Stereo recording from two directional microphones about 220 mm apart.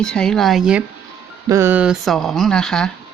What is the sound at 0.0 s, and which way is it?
Speech, 5° left (ahead or behind).